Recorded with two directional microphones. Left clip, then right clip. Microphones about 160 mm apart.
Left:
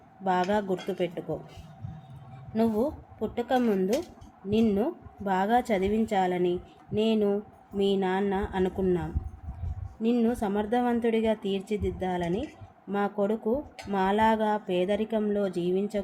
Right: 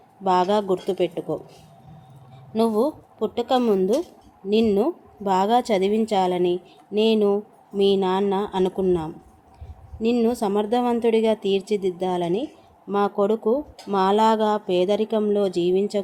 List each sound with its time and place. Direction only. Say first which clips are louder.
0.3 s a woman's voice: right 7 dB; 20° right (ahead or behind)
2.5 s a woman's voice: right 6 dB; 20° right (ahead or behind)